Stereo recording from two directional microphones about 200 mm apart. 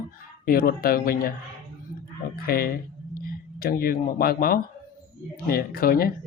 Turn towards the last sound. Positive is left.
turn(degrees=50)  # may be behind; listen again after turning